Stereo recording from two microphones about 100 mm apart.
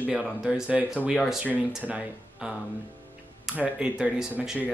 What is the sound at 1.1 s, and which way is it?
Speech, centre (ahead or behind).